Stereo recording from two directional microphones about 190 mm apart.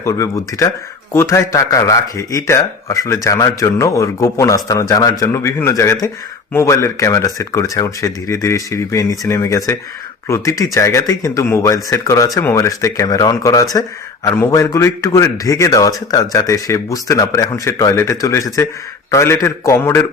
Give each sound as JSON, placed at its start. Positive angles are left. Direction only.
{"t": 0.0, "sound": "a man's voice", "side_deg": 15}